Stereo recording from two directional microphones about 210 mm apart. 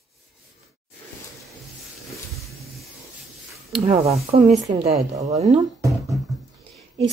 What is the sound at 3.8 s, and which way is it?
Speech, 30° right (ahead or behind).